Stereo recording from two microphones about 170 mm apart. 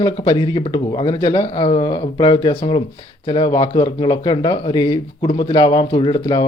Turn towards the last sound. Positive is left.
turn(degrees=30)  # may be behind; listen again after turning